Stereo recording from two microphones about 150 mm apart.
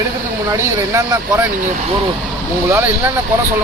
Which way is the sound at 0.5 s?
20° right (ahead or behind).